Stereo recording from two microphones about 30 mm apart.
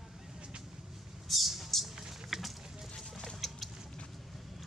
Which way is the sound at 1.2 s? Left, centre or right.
Centre.